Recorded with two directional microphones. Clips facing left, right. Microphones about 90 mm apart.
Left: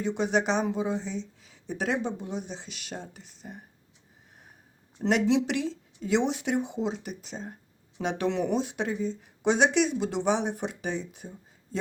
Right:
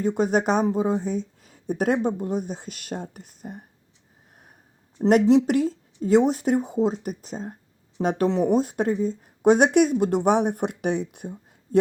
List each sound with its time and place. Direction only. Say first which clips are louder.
0.0 s speech: right 5 dB; 45° right (ahead or behind)
4.9 s speech: right 7 dB; 45° right (ahead or behind)